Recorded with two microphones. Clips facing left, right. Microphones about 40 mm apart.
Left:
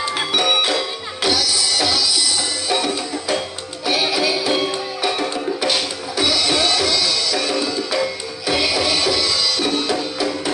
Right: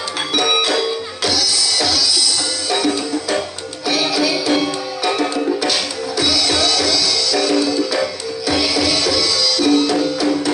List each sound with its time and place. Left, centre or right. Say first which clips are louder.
1.2 s music: left 1 dB; left
3.8 s music: right 1 dB; left